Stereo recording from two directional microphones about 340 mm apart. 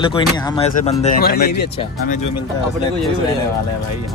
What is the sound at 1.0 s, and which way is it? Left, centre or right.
Speech, left.